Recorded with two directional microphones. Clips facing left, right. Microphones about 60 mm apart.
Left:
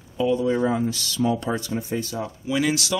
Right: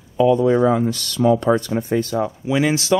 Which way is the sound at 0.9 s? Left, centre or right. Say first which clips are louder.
Right 7 dB; right.